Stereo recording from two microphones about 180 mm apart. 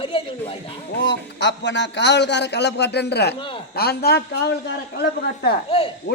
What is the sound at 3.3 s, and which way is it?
Speech, 30° left (ahead or behind).